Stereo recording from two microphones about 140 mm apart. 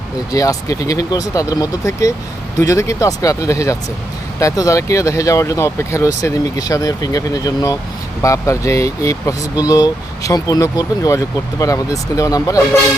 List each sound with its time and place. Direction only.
0.3 s speech: 25° left (ahead or behind)